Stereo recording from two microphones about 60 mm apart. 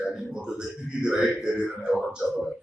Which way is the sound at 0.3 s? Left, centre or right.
Centre.